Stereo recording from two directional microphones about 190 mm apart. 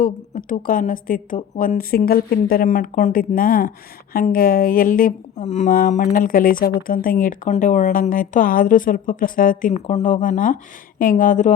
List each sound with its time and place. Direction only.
0.0 s speech: 45° left (ahead or behind)